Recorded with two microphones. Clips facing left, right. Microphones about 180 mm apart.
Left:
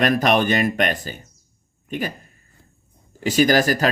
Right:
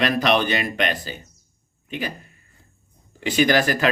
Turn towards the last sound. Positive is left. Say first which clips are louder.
# left 2 dB
turn(degrees=40)  # may be behind; listen again after turning